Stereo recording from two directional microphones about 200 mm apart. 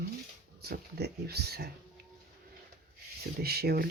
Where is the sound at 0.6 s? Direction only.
50° right (ahead or behind).